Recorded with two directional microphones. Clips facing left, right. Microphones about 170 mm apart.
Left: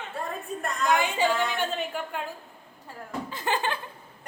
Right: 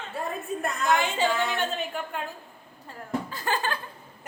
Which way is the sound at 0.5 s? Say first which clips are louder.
Right 5 dB; 5° right (ahead or behind).